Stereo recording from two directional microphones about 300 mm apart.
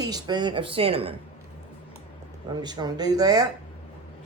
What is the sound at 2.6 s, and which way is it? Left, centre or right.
Speech, centre.